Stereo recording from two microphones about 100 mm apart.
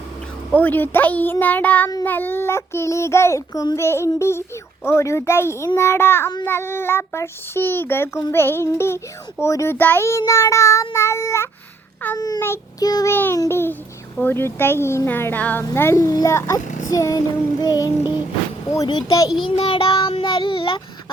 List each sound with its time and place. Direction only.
0.5 s a child's voice: 15° left (ahead or behind); by 3.8 s 35° left (ahead or behind)
3.8 s a child's voice: 25° left (ahead or behind)
13.1 s a child's voice: 20° left (ahead or behind); by 18.1 s 40° left (ahead or behind)
19.4 s child singing: 65° left (ahead or behind)